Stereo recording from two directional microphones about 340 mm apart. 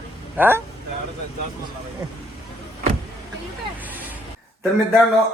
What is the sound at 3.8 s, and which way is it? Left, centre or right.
Vehicle, centre.